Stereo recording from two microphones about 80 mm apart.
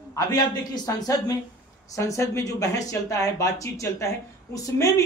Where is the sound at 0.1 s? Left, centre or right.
Left.